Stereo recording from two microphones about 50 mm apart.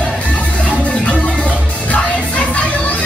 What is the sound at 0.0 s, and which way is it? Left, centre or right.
Music, left.